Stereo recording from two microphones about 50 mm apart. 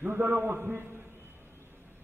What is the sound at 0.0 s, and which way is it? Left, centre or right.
A man's voice, right.